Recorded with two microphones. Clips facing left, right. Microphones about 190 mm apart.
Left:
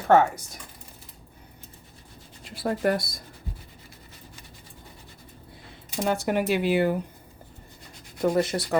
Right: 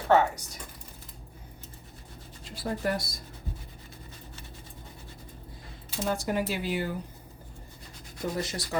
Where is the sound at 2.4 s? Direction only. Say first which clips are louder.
Left 6 dB; 60° left (ahead or behind).